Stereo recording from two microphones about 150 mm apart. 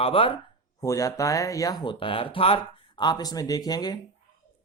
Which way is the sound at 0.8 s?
20° left (ahead or behind).